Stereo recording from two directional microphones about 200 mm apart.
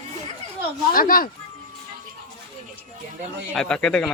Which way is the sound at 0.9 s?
45° left (ahead or behind).